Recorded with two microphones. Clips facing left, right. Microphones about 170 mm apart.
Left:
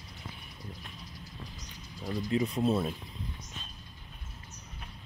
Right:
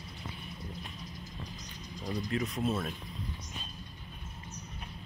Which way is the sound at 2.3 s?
25° left (ahead or behind).